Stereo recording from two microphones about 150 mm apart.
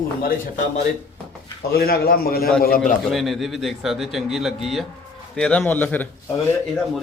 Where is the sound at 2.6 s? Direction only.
75° left (ahead or behind).